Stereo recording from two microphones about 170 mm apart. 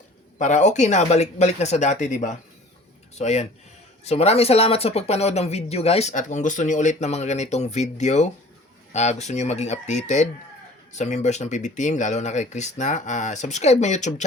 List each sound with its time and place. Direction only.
0.3 s speech: 45° left (ahead or behind)